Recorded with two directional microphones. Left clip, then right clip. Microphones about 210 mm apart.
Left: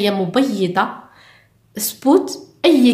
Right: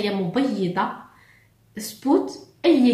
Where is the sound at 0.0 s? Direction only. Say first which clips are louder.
Left 6 dB; 45° left (ahead or behind).